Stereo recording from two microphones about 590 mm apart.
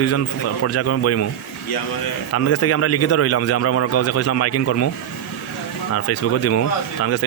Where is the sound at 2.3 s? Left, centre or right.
Left.